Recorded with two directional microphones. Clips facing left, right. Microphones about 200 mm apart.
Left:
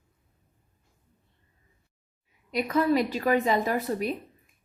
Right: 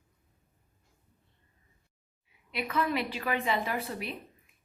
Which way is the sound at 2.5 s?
40° left (ahead or behind).